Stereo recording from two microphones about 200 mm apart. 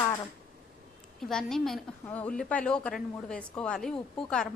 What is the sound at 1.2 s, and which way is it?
A woman's voice, centre (ahead or behind).